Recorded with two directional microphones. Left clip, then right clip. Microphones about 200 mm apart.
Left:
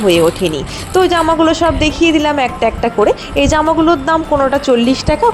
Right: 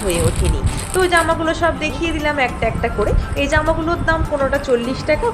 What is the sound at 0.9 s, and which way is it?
A woman's voice, 30° left (ahead or behind).